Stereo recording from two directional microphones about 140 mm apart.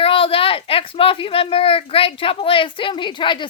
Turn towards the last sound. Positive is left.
turn(degrees=35)  # may be behind; listen again after turning